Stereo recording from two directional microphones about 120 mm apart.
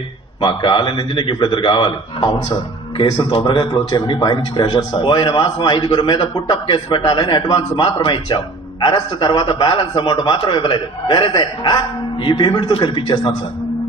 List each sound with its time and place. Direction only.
0.4 s a man's voice: 45° left (ahead or behind)